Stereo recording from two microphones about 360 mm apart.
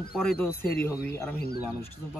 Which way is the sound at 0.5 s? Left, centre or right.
Left.